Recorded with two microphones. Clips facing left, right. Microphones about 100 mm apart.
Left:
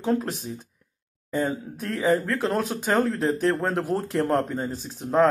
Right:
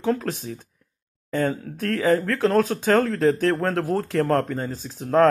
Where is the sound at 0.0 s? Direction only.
10° left (ahead or behind).